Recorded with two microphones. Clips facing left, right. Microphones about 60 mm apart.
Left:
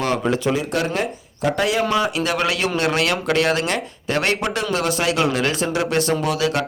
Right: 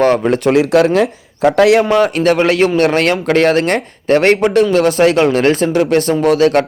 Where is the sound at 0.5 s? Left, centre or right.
Right.